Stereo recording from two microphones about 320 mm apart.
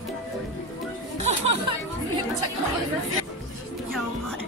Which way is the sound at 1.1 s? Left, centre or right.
Centre.